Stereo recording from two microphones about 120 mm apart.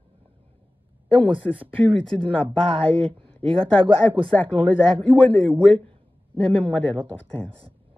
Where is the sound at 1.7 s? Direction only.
10° left (ahead or behind).